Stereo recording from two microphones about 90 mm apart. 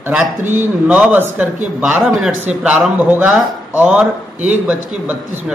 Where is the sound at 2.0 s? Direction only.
Centre (ahead or behind).